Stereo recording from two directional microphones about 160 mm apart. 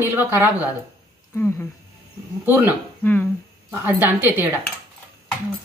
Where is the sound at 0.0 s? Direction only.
10° right (ahead or behind).